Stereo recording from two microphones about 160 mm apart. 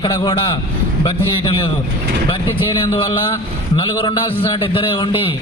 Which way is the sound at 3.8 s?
30° left (ahead or behind).